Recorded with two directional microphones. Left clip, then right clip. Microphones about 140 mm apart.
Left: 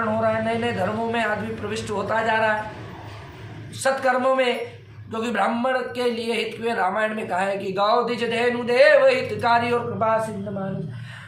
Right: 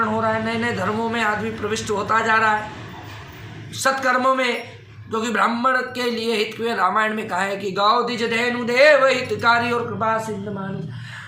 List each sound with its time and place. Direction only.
0.2 s a man's voice: 15° left (ahead or behind)
3.8 s a man's voice: 15° left (ahead or behind)